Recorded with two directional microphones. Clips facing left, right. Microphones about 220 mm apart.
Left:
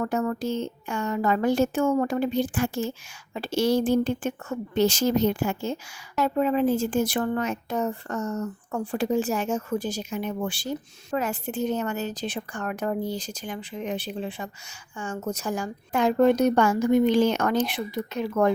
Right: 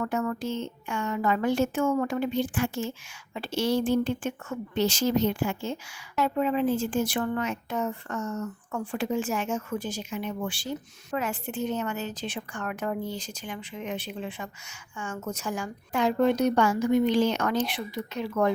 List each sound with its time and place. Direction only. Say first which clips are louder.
0.0 s a woman's voice: left 3 dB; 35° left (ahead or behind)